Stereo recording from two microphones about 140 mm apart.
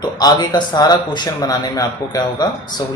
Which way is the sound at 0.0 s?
30° left (ahead or behind).